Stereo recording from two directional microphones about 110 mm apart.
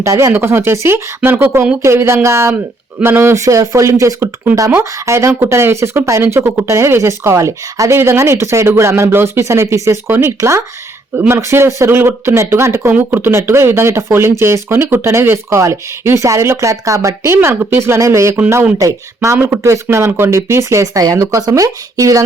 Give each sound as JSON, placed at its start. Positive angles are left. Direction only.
{"t": 0.0, "sound": "speech", "side_deg": -25}
{"t": 1.8, "sound": "speech", "side_deg": -25}